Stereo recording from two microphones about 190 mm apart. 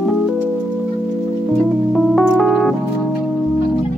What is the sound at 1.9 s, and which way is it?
Music, centre (ahead or behind).